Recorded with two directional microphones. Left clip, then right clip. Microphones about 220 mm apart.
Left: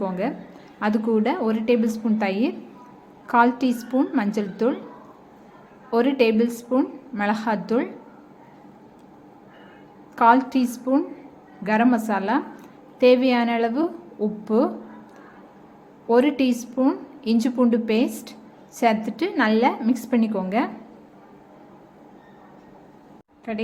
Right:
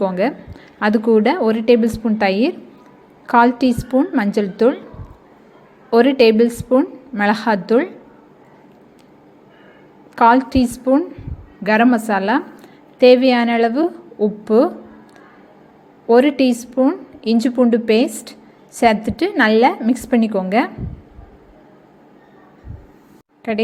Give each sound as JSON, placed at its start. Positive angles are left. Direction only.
{"t": 0.0, "sound": "a woman's voice", "side_deg": -20}
{"t": 5.9, "sound": "a woman's voice", "side_deg": -20}
{"t": 10.2, "sound": "a woman's voice", "side_deg": -15}
{"t": 16.0, "sound": "a woman's voice", "side_deg": -15}
{"t": 23.5, "sound": "a woman's voice", "side_deg": -25}